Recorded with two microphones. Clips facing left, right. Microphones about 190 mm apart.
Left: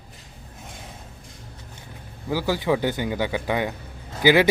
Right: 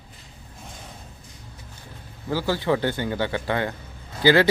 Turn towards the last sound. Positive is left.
turn(degrees=15)  # may be behind; listen again after turning